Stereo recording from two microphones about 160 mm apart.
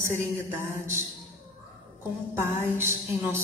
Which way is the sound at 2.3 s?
15° right (ahead or behind).